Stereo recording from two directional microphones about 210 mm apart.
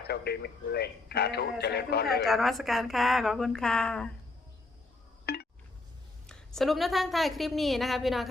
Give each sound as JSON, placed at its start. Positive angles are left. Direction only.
{"t": 0.1, "sound": "speech", "side_deg": 50}
{"t": 2.2, "sound": "a woman's voice", "side_deg": 0}
{"t": 5.2, "sound": "a sound", "side_deg": 50}
{"t": 6.2, "sound": "a woman's voice", "side_deg": 0}